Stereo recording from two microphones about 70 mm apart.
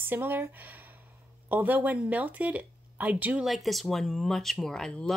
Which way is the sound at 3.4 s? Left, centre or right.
Centre.